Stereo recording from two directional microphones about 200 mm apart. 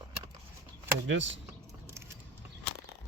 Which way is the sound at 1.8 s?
15° right (ahead or behind).